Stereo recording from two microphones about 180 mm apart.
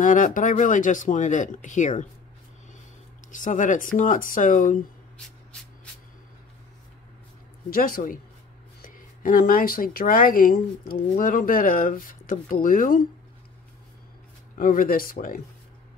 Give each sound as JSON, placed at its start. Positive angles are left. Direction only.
{"t": 0.0, "sound": "speech", "side_deg": 45}
{"t": 3.3, "sound": "speech", "side_deg": 45}
{"t": 7.7, "sound": "speech", "side_deg": 50}
{"t": 14.5, "sound": "speech", "side_deg": 50}